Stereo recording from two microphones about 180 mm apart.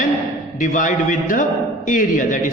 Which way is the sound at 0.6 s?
45° left (ahead or behind).